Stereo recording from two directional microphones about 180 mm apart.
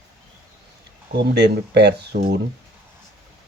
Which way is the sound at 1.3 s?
65° right (ahead or behind).